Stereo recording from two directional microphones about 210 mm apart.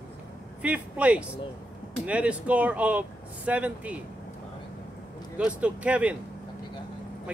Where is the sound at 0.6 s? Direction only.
5° right (ahead or behind).